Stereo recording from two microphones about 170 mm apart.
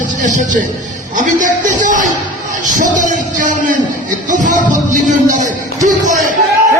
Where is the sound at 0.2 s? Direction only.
45° right (ahead or behind).